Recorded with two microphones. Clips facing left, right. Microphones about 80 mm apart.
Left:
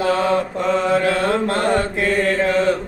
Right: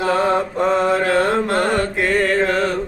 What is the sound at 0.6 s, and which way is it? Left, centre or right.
Mantra, right.